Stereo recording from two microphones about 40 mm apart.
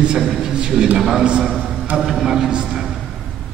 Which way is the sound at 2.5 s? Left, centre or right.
Right.